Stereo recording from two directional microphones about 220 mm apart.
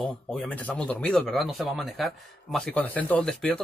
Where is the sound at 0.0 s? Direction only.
5° left (ahead or behind).